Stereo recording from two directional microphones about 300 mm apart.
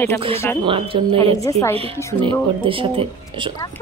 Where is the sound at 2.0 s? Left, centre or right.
Centre.